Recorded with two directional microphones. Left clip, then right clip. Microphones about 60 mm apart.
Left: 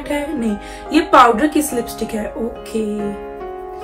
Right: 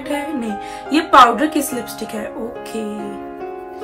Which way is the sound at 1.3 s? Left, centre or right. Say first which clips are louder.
Left 2 dB; right.